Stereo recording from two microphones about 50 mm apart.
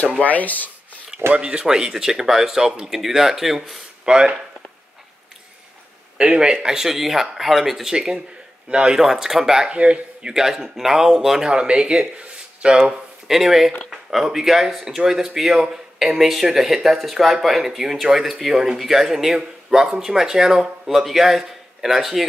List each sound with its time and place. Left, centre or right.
0.2 s speech: left
1.3 s speech: right; by 3.8 s centre
4.0 s speech: centre
6.1 s speech: centre
7.9 s speech: centre
9.8 s speech: right
11.5 s speech: centre
12.8 s speech: centre